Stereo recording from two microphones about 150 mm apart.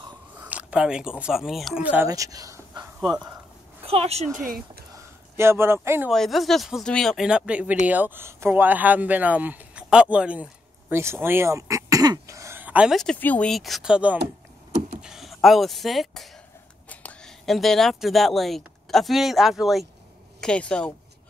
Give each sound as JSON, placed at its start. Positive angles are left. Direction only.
{"t": 0.4, "sound": "a sound", "side_deg": -10}
{"t": 1.2, "sound": "speech", "side_deg": -5}
{"t": 2.0, "sound": "speech", "side_deg": -25}
{"t": 3.0, "sound": "speech", "side_deg": -5}
{"t": 3.8, "sound": "a woman's voice", "side_deg": -40}
{"t": 5.3, "sound": "a man's voice", "side_deg": -15}
{"t": 6.0, "sound": "speech", "side_deg": 0}
{"t": 13.0, "sound": "speech", "side_deg": 10}